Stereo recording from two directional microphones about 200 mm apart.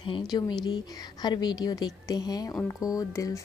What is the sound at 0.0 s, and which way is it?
A woman's voice, 25° left (ahead or behind).